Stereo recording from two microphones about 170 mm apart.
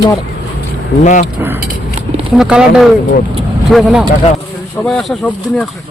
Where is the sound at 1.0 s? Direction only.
45° left (ahead or behind).